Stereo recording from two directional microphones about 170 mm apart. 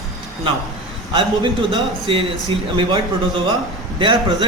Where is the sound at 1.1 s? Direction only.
30° right (ahead or behind).